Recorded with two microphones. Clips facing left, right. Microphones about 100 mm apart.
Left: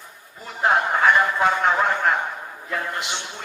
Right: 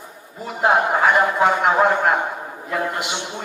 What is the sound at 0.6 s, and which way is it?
A man's voice, 15° right (ahead or behind).